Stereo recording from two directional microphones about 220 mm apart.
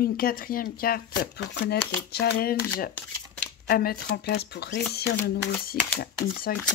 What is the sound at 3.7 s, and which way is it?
Speech, 45° left (ahead or behind).